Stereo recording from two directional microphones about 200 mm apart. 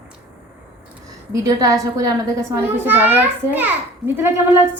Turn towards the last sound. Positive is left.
turn(degrees=-10)  # may be behind; listen again after turning